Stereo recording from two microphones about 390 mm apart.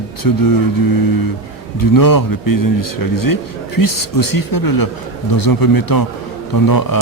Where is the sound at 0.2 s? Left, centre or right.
Left.